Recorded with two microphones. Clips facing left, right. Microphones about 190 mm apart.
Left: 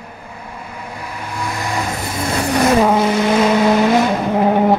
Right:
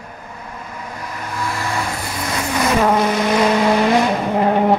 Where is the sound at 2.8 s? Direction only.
10° left (ahead or behind).